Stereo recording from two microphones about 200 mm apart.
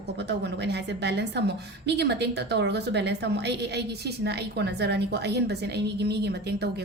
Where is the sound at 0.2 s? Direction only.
60° right (ahead or behind).